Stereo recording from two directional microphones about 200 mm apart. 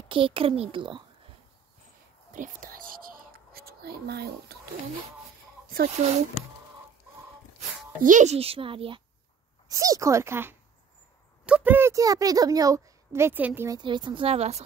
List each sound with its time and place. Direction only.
0.1 s a child's voice: 25° right (ahead or behind)
2.3 s whispering: 45° right (ahead or behind)
5.7 s speech: 40° right (ahead or behind)
8.0 s a child's voice: 40° right (ahead or behind)